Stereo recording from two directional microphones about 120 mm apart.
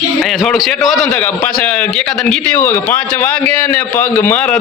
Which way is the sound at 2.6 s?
15° left (ahead or behind).